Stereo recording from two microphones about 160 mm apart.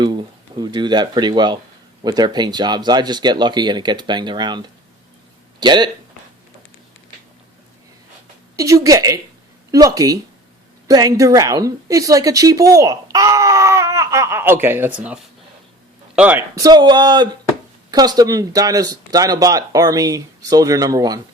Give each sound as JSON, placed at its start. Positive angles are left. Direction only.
{"t": 0.0, "sound": "speech", "side_deg": -30}
{"t": 8.5, "sound": "a woman's voice", "side_deg": -20}
{"t": 16.6, "sound": "speech", "side_deg": -25}